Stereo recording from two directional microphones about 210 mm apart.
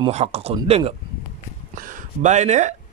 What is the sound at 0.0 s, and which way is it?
Speech, 30° right (ahead or behind).